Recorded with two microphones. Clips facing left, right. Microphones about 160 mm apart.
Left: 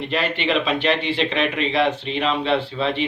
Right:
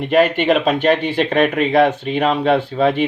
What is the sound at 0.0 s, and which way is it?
Speech, 50° right (ahead or behind).